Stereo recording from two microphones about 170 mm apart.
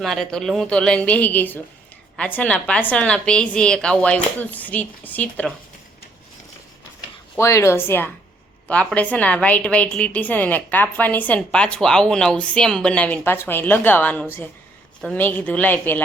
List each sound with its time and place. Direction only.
0.0 s a woman's voice: centre (ahead or behind)
7.3 s a woman's voice: 15° left (ahead or behind)